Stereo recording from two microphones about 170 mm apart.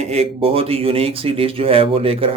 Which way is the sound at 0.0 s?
40° right (ahead or behind).